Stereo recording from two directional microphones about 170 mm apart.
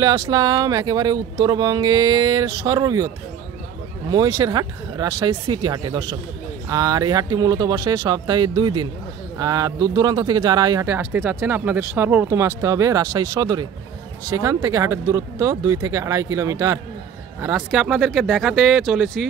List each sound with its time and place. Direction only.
0.0 s speech: 25° right (ahead or behind)
4.1 s speech: 25° right (ahead or behind)
17.6 s speech: centre (ahead or behind)